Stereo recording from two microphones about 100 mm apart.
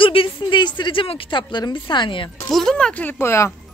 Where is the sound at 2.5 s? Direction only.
5° left (ahead or behind).